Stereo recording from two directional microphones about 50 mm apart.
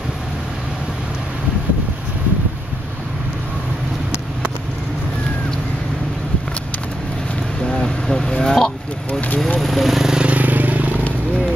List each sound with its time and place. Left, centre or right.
7.6 s vehicle: centre
9.6 s a sound: centre
10.1 s vehicle: right